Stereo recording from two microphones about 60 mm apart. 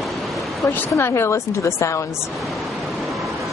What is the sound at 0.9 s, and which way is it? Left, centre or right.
A woman's voice, left.